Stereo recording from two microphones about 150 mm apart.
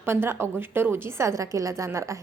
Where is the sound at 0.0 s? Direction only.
15° right (ahead or behind).